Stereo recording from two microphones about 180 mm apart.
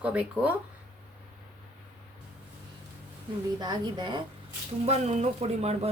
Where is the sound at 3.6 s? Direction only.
20° right (ahead or behind).